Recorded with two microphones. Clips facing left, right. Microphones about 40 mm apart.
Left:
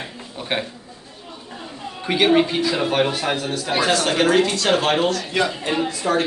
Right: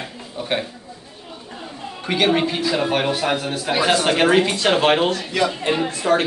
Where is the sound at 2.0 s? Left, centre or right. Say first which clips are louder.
Left 2 dB; centre.